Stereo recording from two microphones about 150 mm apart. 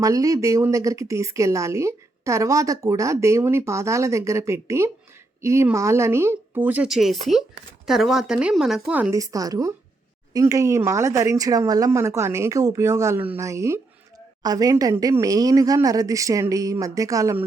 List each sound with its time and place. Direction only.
0.0 s speech: 25° right (ahead or behind)
9.1 s speech: 20° right (ahead or behind)